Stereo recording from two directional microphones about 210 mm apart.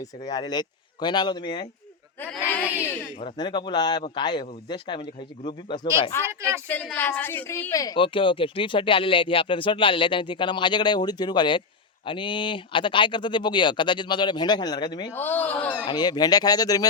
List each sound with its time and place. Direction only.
0.0 s speech: 20° left (ahead or behind)
2.2 s speech: 5° left (ahead or behind)
3.2 s speech: 25° left (ahead or behind)
6.1 s speech: 10° left (ahead or behind)
15.1 s speech: 10° left (ahead or behind)
15.9 s speech: 20° left (ahead or behind)